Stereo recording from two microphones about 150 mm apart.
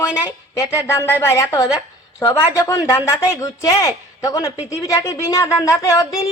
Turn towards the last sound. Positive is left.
turn(degrees=20)  # may be behind; listen again after turning